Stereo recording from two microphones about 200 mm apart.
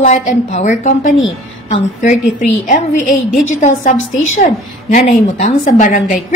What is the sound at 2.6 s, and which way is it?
A woman's voice, 40° left (ahead or behind).